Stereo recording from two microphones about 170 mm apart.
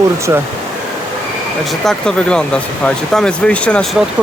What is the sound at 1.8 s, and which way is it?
Speech, 5° left (ahead or behind).